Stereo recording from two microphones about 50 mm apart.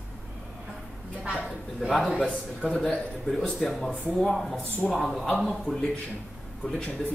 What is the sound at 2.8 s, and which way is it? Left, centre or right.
A man's voice, centre.